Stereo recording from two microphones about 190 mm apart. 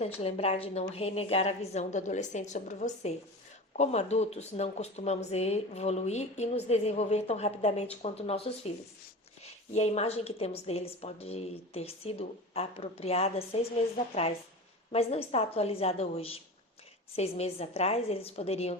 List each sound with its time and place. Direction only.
0.0 s speech: 30° left (ahead or behind)
9.7 s speech: 35° left (ahead or behind)
14.9 s speech: 30° left (ahead or behind)